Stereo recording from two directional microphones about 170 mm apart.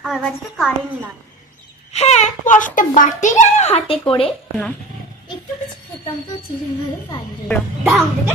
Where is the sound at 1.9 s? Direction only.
40° left (ahead or behind).